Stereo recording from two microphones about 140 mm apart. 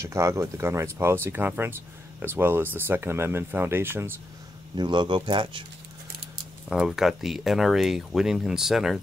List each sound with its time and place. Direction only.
0.0 s speech: 20° right (ahead or behind)
4.7 s speech: 35° right (ahead or behind)
6.7 s speech: 5° right (ahead or behind)